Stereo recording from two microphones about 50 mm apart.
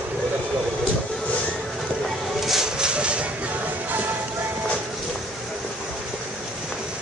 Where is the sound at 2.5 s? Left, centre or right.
Centre.